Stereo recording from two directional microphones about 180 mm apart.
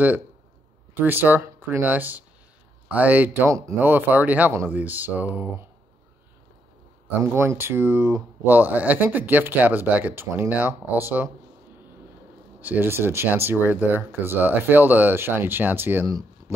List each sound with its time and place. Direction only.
0.9 s speech: 10° right (ahead or behind)
7.1 s speech: 15° right (ahead or behind)
12.5 s speech: 10° right (ahead or behind)